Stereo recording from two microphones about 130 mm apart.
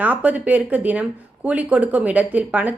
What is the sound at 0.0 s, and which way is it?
Speech, 15° right (ahead or behind).